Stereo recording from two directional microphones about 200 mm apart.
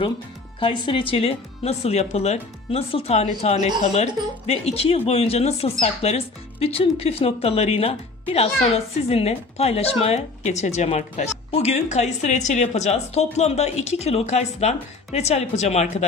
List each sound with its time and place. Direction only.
0.6 s speech: 25° left (ahead or behind)
9.0 s speech: 30° left (ahead or behind)